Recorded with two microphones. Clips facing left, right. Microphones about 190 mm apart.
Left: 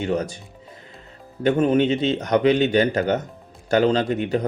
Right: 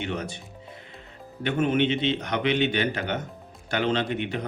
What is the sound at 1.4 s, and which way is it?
Speech, 40° left (ahead or behind).